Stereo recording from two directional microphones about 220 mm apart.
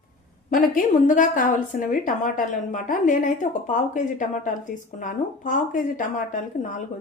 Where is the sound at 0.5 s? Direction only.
40° left (ahead or behind).